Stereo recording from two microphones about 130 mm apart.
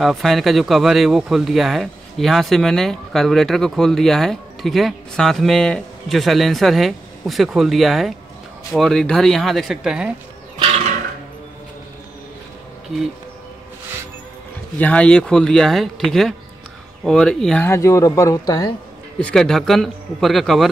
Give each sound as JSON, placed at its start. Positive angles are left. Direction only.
{"t": 0.0, "sound": "speech", "side_deg": 0}
{"t": 14.8, "sound": "speech", "side_deg": 10}
{"t": 17.6, "sound": "speech", "side_deg": 20}
{"t": 19.1, "sound": "speech", "side_deg": 5}